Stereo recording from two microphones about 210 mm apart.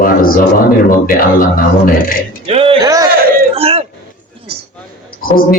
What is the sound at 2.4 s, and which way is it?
Music, 25° right (ahead or behind).